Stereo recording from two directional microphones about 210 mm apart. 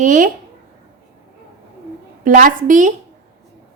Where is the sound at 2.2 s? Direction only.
40° right (ahead or behind).